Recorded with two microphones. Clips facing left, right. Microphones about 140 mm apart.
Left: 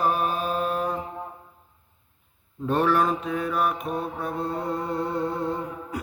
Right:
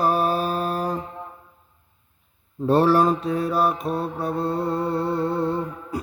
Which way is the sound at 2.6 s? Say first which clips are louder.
Right 5 dB; 35° right (ahead or behind).